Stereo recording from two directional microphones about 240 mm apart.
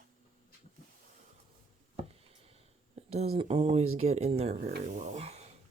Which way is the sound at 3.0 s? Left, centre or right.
Right.